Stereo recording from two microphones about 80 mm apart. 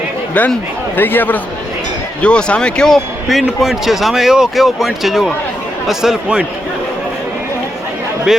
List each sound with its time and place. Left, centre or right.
0.4 s a man's voice: centre
2.2 s speech: centre
8.3 s speech: centre